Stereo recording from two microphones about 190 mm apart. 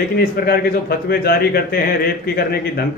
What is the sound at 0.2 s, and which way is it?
Speech, 55° left (ahead or behind).